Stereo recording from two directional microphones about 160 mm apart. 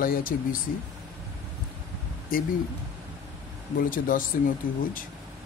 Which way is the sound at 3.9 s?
60° left (ahead or behind).